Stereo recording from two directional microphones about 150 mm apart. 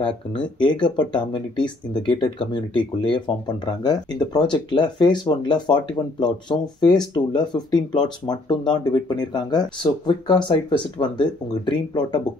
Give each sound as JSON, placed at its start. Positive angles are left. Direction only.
{"t": 0.0, "sound": "speech", "side_deg": 30}